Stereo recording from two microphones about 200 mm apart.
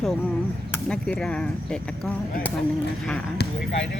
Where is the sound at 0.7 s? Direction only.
5° left (ahead or behind).